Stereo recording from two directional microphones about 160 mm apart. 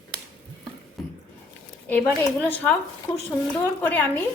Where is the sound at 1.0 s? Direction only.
Centre (ahead or behind).